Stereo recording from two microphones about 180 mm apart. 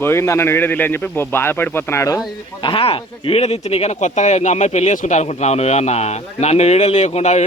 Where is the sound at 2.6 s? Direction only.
30° left (ahead or behind).